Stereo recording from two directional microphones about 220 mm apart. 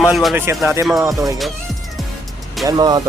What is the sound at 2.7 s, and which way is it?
Music, 20° right (ahead or behind).